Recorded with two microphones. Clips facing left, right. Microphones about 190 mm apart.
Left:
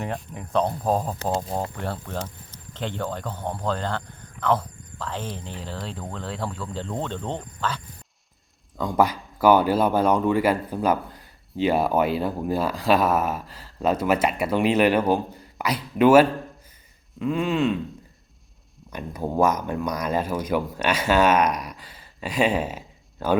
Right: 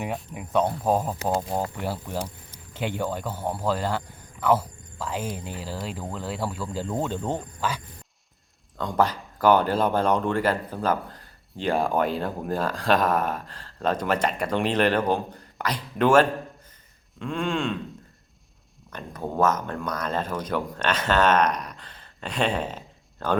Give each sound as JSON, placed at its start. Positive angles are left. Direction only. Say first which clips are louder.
{"t": 0.0, "sound": "speech", "louder": "even", "side_deg": -5}
{"t": 8.8, "sound": "speech", "louder": "left 2 dB", "side_deg": 5}
{"t": 18.9, "sound": "speech", "louder": "left 3 dB", "side_deg": 10}